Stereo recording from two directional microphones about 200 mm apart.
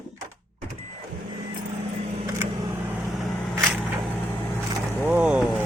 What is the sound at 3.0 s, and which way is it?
Vehicle, centre (ahead or behind).